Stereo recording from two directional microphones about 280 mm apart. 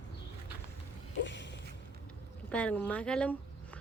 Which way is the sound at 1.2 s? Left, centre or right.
Left.